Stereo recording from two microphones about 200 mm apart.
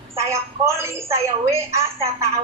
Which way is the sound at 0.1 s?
15° right (ahead or behind).